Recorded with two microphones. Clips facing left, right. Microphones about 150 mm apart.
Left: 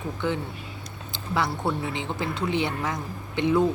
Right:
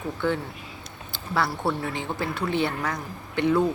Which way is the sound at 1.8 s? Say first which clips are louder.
Even; 20° left (ahead or behind).